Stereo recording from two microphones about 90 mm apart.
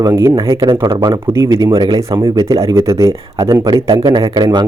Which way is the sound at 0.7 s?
75° right (ahead or behind).